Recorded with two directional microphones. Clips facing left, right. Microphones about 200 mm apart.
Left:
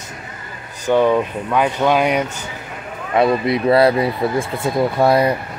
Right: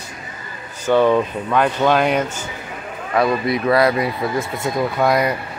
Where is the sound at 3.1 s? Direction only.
25° left (ahead or behind).